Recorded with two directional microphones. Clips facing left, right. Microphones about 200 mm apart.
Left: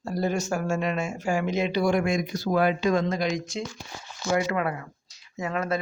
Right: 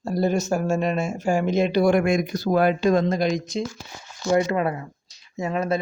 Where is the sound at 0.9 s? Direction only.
40° right (ahead or behind).